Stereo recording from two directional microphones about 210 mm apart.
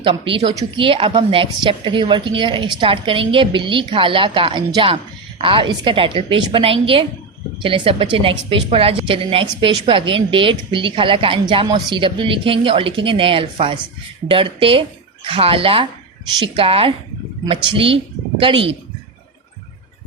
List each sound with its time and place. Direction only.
0.0 s a woman's voice: 25° right (ahead or behind)